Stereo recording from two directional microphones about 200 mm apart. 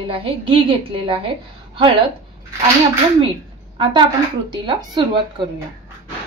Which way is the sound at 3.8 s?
25° right (ahead or behind).